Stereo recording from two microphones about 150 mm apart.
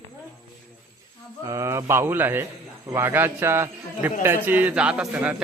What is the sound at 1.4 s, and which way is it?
A man's voice, 20° right (ahead or behind).